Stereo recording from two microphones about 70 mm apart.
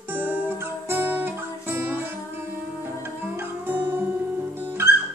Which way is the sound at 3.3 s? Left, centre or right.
Right.